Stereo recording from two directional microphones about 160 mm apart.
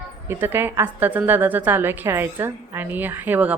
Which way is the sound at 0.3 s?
15° right (ahead or behind).